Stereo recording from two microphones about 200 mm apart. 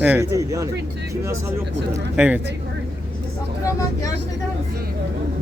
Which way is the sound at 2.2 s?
5° right (ahead or behind).